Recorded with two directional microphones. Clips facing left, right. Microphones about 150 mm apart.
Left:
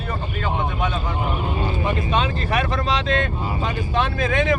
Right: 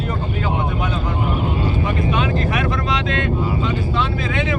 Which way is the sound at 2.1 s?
30° left (ahead or behind).